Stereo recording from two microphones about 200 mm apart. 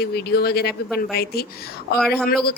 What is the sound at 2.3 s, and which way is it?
Speech, 50° left (ahead or behind).